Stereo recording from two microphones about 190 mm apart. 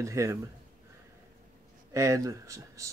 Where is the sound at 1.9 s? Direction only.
15° right (ahead or behind).